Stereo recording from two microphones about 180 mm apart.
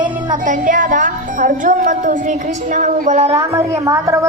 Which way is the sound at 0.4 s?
45° right (ahead or behind).